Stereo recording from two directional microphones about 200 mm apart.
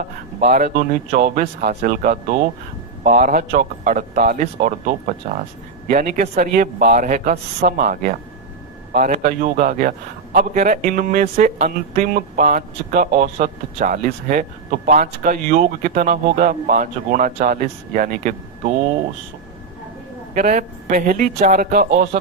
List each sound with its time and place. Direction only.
0.0 s speech: 45° right (ahead or behind)
20.3 s speech: 40° right (ahead or behind)